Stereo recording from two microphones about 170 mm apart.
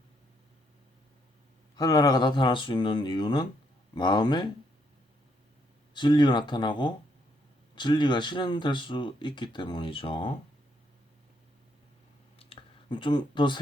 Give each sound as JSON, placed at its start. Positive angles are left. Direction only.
{"t": 1.7, "sound": "speech", "side_deg": 20}
{"t": 5.9, "sound": "speech", "side_deg": 25}
{"t": 12.4, "sound": "clicking", "side_deg": 30}